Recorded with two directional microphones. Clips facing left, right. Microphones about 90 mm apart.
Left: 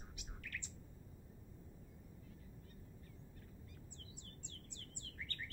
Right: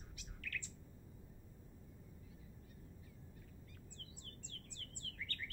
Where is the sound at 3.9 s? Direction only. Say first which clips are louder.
Even; 20° left (ahead or behind).